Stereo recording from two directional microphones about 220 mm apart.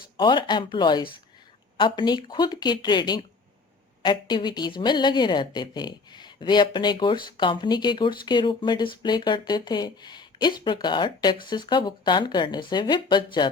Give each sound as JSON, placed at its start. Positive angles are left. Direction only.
{"t": 0.2, "sound": "a woman's voice", "side_deg": 20}